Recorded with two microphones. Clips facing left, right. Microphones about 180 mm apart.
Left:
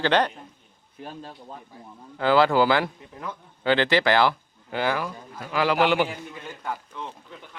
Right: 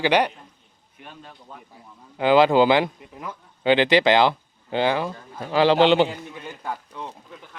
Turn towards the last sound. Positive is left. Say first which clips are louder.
# right 1 dB
turn(degrees=-15)  # may be behind; listen again after turning